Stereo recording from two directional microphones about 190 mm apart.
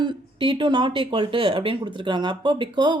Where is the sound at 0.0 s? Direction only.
25° right (ahead or behind).